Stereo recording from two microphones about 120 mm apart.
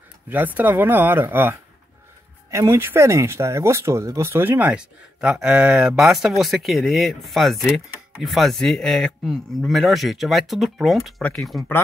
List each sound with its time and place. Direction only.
0.3 s a man's voice: 15° right (ahead or behind); by 11.6 s centre (ahead or behind)